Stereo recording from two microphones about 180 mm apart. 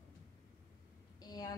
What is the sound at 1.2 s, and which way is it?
Speech, 20° left (ahead or behind).